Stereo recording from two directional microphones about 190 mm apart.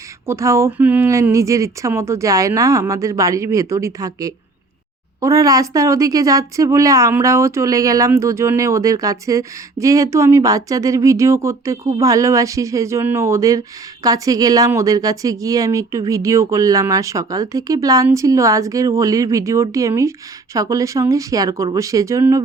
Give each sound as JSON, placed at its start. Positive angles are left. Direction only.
{"t": 0.3, "sound": "speech", "side_deg": -15}